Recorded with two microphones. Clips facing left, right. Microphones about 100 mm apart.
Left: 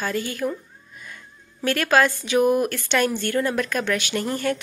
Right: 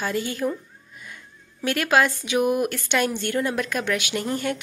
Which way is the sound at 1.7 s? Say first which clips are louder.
Left 1 dB; 15° right (ahead or behind).